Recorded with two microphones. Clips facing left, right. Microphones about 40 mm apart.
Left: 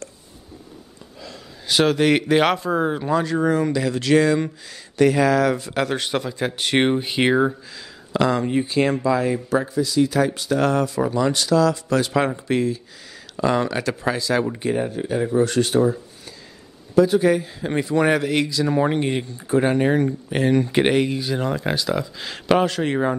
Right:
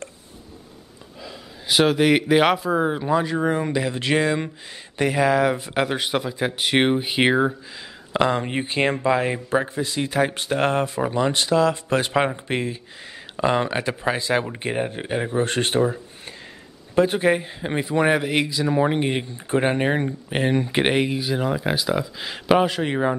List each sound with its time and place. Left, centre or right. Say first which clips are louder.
1.2 s speech: right 1 dB; centre
8.1 s a man's voice: left 1 dB; right; by 23.1 s centre